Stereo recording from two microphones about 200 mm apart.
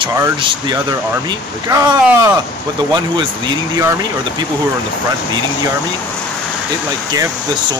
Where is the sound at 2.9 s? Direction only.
25° right (ahead or behind).